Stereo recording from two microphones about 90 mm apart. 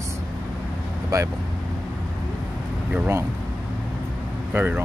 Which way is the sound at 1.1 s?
40° right (ahead or behind).